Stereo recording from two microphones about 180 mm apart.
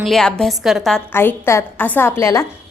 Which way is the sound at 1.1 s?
15° left (ahead or behind).